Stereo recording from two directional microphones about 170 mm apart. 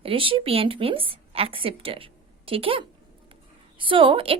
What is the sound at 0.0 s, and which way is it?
Speech, 30° right (ahead or behind).